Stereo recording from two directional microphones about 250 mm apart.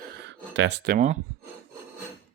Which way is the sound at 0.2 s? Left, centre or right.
Right.